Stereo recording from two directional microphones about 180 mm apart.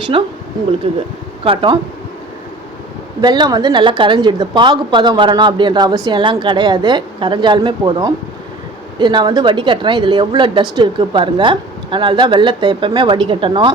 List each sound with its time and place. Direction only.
0.1 s a woman's voice: 30° right (ahead or behind)
1.5 s a woman's voice: 25° right (ahead or behind)
3.2 s a woman's voice: 25° right (ahead or behind)